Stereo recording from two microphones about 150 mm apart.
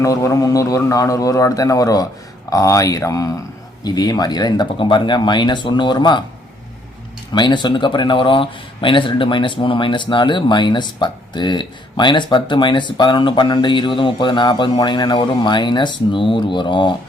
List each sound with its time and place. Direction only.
0.0 s speech: 20° left (ahead or behind)
7.3 s speech: 30° left (ahead or behind)